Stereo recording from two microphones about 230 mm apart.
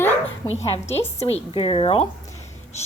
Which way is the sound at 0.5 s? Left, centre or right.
Left.